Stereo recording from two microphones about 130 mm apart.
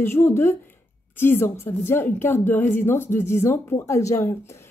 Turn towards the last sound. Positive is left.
turn(degrees=25)  # may be behind; listen again after turning